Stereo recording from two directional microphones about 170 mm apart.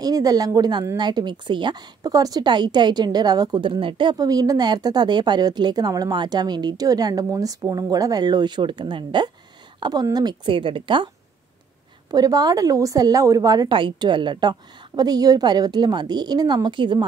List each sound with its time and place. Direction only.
0.0 s speech: 20° right (ahead or behind)
12.1 s speech: 20° right (ahead or behind)